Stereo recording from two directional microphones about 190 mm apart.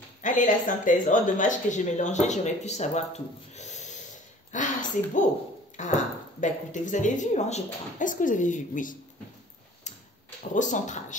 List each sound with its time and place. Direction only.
0.2 s a woman's voice: 45° left (ahead or behind)
4.5 s a sound: 40° left (ahead or behind)
5.8 s a woman's voice: 40° left (ahead or behind)
9.9 s tick-tock: 35° left (ahead or behind)
10.5 s a woman's voice: 40° left (ahead or behind)